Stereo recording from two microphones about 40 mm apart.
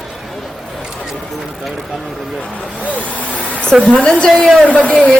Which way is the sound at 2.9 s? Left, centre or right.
Left.